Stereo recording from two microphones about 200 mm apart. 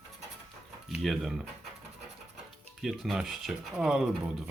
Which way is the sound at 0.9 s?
Centre (ahead or behind).